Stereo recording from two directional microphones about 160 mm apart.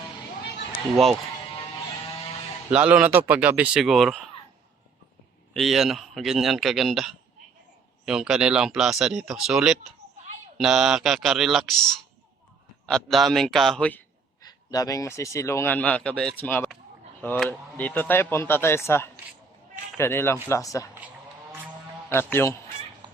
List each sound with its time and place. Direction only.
2.6 s speech: 10° right (ahead or behind)
5.5 s speech: centre (ahead or behind)
12.8 s speech: centre (ahead or behind)
14.4 s a man's voice: 20° left (ahead or behind)
22.1 s a man's voice: 15° left (ahead or behind)